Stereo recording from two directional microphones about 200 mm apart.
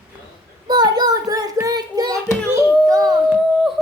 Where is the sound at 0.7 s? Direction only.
20° right (ahead or behind).